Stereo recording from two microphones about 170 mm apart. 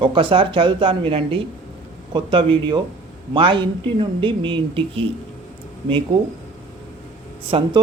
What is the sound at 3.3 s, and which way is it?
Speech, 30° right (ahead or behind).